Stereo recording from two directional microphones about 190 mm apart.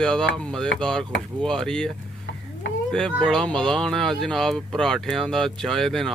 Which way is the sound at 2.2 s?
65° left (ahead or behind).